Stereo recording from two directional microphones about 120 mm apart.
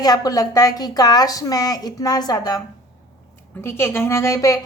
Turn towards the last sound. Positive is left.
turn(degrees=25)  # may be behind; listen again after turning